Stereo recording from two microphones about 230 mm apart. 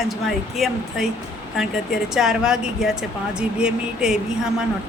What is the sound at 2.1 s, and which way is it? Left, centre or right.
Speech, centre.